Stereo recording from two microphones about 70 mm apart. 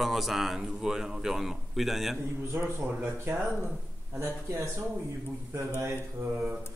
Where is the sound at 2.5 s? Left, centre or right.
Right.